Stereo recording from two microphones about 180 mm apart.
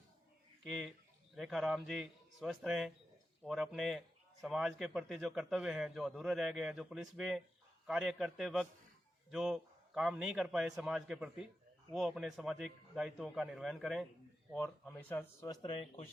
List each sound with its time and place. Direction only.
0.6 s a man's voice: centre (ahead or behind)
14.5 s speech: 10° left (ahead or behind)
15.6 s speech: 30° left (ahead or behind)